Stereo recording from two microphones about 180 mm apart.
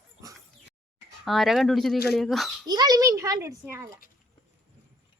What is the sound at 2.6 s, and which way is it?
A child's voice, 20° right (ahead or behind).